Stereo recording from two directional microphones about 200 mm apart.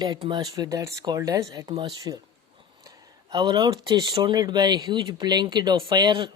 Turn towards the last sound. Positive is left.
turn(degrees=-20)  # may be behind; listen again after turning